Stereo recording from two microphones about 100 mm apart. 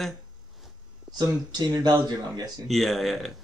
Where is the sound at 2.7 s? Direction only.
Centre (ahead or behind).